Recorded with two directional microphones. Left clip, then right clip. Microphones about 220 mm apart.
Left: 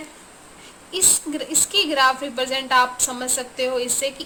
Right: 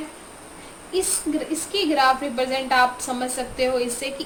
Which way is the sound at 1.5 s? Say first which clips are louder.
Left 6 dB; 30° left (ahead or behind).